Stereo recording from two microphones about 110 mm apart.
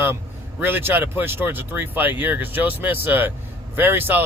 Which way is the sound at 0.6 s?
20° right (ahead or behind).